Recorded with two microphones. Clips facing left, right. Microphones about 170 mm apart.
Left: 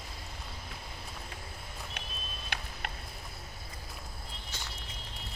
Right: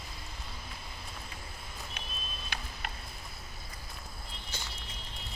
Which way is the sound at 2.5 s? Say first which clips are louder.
Left 2 dB; 75° left (ahead or behind).